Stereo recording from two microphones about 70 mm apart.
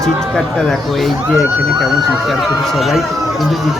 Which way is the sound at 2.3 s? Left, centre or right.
Centre.